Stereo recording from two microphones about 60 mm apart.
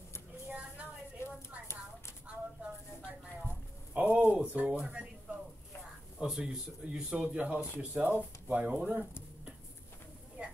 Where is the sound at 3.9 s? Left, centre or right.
Right.